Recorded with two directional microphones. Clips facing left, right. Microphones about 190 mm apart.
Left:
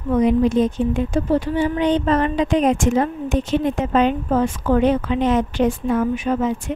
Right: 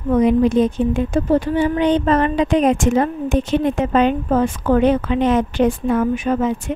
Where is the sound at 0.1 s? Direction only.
60° right (ahead or behind).